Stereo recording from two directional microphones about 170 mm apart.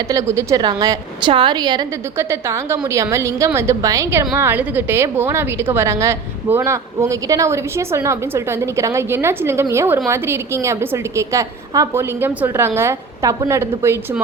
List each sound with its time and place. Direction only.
0.1 s a woman's voice: 20° right (ahead or behind)